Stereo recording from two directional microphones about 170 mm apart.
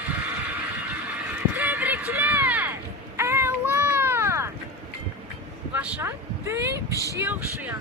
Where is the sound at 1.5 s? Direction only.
10° right (ahead or behind).